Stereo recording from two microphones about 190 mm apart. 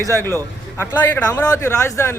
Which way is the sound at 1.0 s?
10° left (ahead or behind).